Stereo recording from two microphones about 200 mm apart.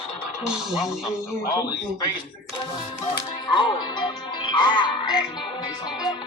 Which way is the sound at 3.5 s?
25° left (ahead or behind).